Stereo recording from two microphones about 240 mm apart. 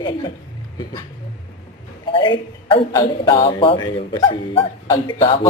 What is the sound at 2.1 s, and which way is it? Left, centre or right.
A man's voice, left.